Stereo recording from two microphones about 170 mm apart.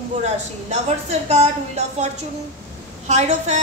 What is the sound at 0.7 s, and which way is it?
Speech, 40° right (ahead or behind).